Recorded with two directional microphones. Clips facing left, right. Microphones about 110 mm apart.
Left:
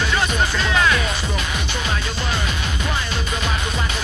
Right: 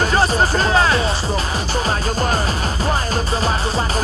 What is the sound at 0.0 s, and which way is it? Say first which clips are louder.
Music: right 5 dB; 35° right (ahead or behind).